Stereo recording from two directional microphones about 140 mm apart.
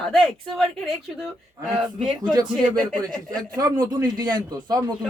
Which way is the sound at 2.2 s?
30° right (ahead or behind).